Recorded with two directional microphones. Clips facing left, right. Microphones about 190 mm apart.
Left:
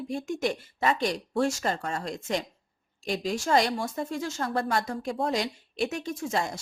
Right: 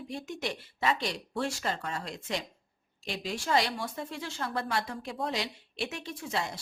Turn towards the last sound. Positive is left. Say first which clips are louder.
# left 5 dB
turn(degrees=45)  # may be behind; listen again after turning